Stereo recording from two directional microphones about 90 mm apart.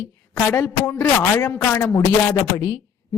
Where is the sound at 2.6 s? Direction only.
35° left (ahead or behind).